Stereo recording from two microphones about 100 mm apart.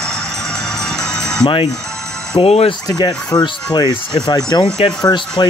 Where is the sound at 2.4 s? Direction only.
75° left (ahead or behind).